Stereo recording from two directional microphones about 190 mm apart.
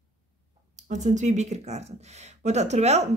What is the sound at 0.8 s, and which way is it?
A woman's voice, 40° right (ahead or behind).